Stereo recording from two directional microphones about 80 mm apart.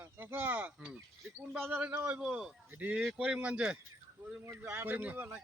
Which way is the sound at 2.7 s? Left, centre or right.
Centre.